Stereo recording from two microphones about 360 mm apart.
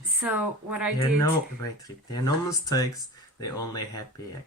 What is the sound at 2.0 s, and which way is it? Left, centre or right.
Speech, centre.